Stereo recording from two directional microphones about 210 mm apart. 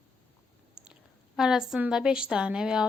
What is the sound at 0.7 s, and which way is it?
A woman's voice, 5° right (ahead or behind).